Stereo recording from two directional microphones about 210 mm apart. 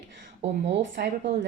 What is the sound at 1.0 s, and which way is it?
Speech, 50° right (ahead or behind).